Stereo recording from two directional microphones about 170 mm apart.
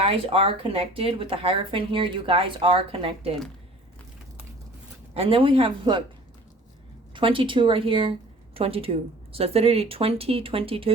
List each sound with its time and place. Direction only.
0.0 s speech: 35° right (ahead or behind)
5.1 s speech: 35° right (ahead or behind)
7.1 s speech: 30° right (ahead or behind)